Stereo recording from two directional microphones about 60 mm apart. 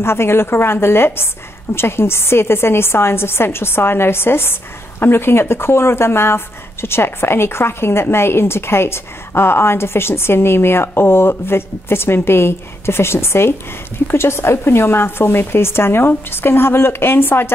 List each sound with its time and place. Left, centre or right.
0.0 s speech: left